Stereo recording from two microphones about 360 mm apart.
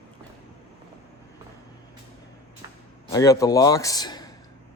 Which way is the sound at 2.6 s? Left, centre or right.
Centre.